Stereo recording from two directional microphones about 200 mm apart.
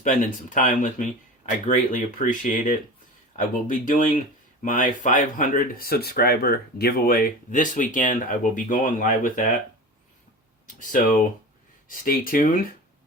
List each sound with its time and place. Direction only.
0.0 s speech: 40° left (ahead or behind)
10.8 s speech: 40° left (ahead or behind)